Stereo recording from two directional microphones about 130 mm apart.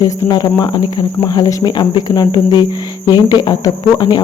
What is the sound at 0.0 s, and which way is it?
Speech, 35° left (ahead or behind).